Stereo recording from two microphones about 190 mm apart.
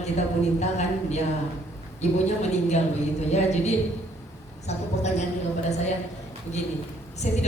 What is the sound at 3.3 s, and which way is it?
A man's voice, 35° left (ahead or behind).